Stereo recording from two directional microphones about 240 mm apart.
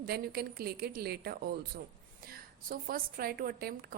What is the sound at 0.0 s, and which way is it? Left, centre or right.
A woman's voice, right.